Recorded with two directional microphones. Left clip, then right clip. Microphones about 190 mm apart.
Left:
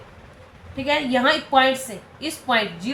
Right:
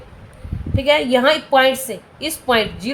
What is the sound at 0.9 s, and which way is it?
A woman's voice, 55° right (ahead or behind).